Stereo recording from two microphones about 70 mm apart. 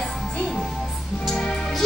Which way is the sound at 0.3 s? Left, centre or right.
Centre.